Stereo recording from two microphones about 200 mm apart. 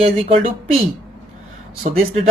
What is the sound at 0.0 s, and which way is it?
Speech, 30° right (ahead or behind).